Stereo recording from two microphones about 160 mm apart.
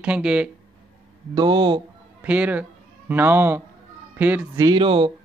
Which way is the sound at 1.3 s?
30° right (ahead or behind).